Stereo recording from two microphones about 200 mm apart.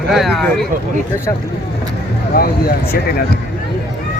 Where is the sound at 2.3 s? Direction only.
45° left (ahead or behind).